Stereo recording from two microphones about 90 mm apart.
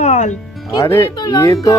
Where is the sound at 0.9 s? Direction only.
25° left (ahead or behind).